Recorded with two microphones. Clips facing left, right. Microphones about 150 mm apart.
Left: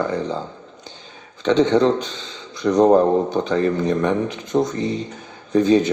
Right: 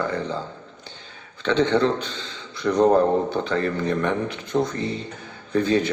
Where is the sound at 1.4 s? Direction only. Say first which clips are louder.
Left 4 dB; 15° left (ahead or behind).